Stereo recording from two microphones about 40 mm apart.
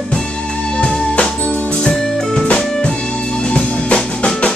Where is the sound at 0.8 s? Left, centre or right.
Left.